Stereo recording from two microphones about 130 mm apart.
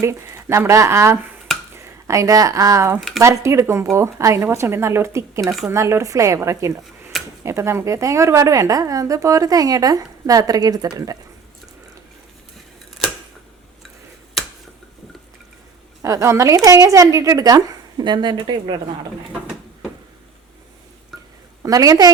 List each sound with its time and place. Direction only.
0.0 s a woman's voice: 20° right (ahead or behind)
16.0 s a woman's voice: 25° right (ahead or behind)
21.1 s a sound: centre (ahead or behind)
21.6 s a woman's voice: 30° right (ahead or behind)